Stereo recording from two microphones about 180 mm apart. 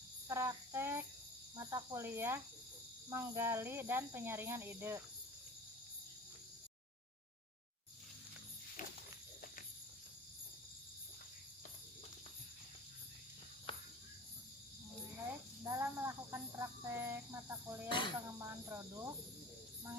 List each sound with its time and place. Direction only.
0.3 s child singing: 15° right (ahead or behind)
1.5 s speech: 15° right (ahead or behind)
15.6 s cricket: 15° right (ahead or behind)
17.8 s cricket: 25° left (ahead or behind)
18.3 s cricket: 15° right (ahead or behind)